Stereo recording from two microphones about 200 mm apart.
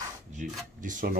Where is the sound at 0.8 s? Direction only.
40° right (ahead or behind).